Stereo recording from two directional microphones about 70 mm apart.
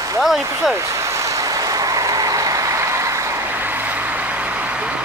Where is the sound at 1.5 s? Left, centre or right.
Right.